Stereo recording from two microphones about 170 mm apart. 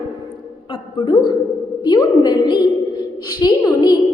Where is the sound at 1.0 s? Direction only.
25° left (ahead or behind).